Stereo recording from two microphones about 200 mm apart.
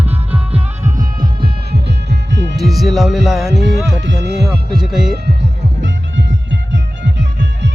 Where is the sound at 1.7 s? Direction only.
60° right (ahead or behind).